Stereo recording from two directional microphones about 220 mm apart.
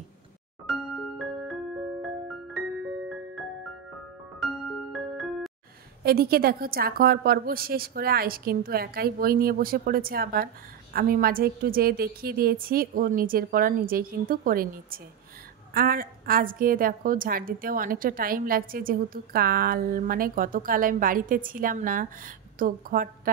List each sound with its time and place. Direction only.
0.7 s music: centre (ahead or behind)
4.4 s music: centre (ahead or behind)
6.0 s a woman's voice: 45° right (ahead or behind)